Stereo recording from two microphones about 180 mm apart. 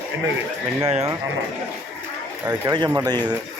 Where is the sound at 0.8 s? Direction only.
35° right (ahead or behind).